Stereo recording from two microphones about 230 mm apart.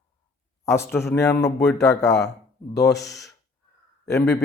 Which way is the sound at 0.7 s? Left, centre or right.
Centre.